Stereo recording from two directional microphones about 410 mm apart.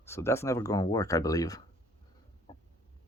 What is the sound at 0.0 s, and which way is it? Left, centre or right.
Speech, centre.